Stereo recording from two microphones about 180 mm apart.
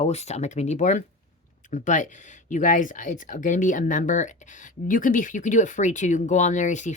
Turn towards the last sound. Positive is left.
turn(degrees=40)  # may be behind; listen again after turning